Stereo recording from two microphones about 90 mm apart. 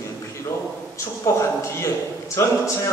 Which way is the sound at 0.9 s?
35° left (ahead or behind).